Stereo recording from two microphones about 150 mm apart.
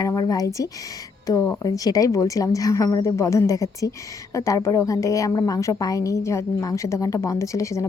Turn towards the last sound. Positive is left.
turn(degrees=20)  # may be behind; listen again after turning